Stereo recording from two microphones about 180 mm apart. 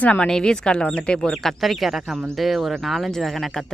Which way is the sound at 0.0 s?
5° left (ahead or behind).